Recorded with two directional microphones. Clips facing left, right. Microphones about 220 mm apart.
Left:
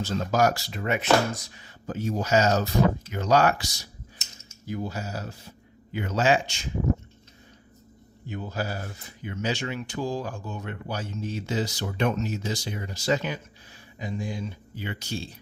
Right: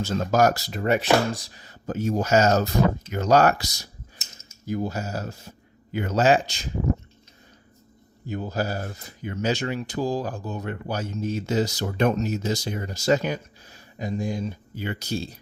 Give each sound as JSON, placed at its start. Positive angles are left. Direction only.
{"t": 0.0, "sound": "speech", "side_deg": -45}
{"t": 8.3, "sound": "speech", "side_deg": -40}